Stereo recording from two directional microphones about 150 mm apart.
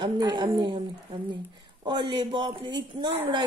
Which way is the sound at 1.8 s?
30° right (ahead or behind).